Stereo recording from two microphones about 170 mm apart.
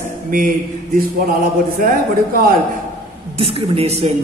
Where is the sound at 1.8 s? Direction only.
55° right (ahead or behind).